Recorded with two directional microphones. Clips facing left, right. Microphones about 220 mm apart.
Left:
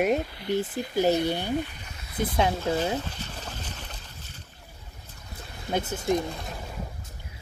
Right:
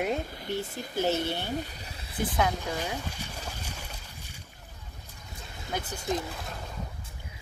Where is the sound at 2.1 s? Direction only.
25° left (ahead or behind).